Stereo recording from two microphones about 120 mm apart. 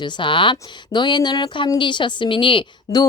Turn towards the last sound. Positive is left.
turn(degrees=40)  # may be behind; listen again after turning